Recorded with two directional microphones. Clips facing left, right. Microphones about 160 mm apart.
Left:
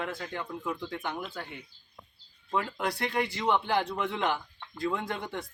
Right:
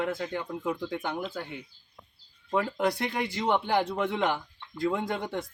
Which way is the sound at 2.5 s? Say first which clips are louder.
Right 4 dB; 25° right (ahead or behind).